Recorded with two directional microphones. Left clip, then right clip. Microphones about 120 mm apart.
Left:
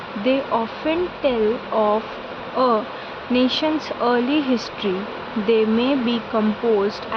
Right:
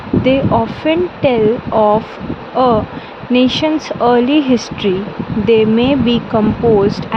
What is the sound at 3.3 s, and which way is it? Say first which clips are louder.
Speech: right 7 dB; 50° right (ahead or behind).